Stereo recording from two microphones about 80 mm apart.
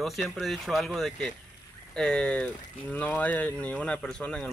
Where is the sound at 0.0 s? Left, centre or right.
Centre.